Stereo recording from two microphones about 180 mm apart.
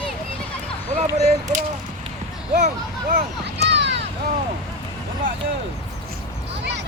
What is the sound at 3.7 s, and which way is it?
Vehicle, 75° right (ahead or behind).